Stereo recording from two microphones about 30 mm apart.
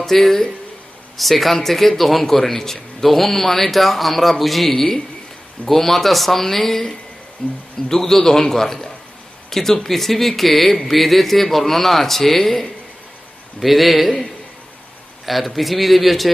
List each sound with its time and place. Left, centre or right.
0.0 s speech: centre
7.4 s speech: left
7.9 s speech: centre
15.2 s speech: centre